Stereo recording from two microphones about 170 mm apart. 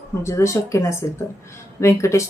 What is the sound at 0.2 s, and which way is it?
A woman's voice, 15° left (ahead or behind).